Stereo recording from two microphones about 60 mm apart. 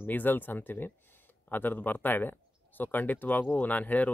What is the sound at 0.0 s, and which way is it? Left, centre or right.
Speech, left.